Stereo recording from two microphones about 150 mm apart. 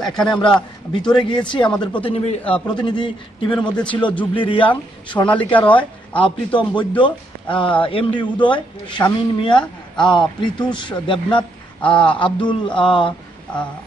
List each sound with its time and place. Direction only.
0.1 s a man's voice: 5° left (ahead or behind)
2.0 s a man's voice: 40° left (ahead or behind)
2.5 s a man's voice: 10° left (ahead or behind)
2.8 s a man's voice: 30° left (ahead or behind)
3.5 s a man's voice: 5° left (ahead or behind)
4.4 s a man's voice: 35° left (ahead or behind)
5.4 s a man's voice: 10° left (ahead or behind)
6.1 s a man's voice: 35° left (ahead or behind)